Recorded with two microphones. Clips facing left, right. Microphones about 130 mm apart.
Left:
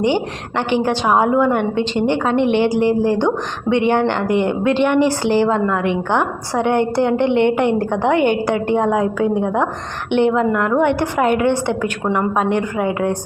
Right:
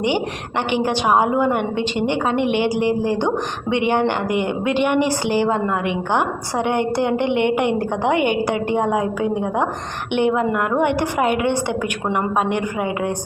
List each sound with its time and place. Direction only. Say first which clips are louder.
0.7 s a woman's voice: left 2 dB; 15° right (ahead or behind)